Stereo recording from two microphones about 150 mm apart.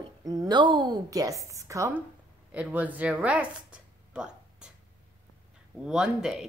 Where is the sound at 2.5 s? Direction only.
10° right (ahead or behind).